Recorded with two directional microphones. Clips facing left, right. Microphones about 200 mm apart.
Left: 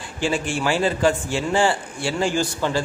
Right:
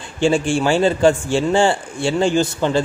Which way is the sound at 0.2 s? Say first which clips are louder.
Right 7 dB; 25° right (ahead or behind).